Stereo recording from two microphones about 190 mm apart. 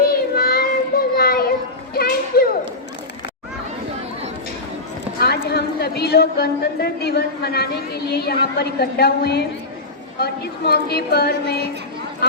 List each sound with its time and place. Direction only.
0.1 s child singing: 55° left (ahead or behind)
5.5 s a woman's voice: 60° left (ahead or behind)